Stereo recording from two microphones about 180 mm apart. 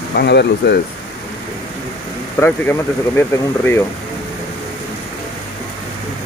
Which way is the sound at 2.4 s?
10° left (ahead or behind).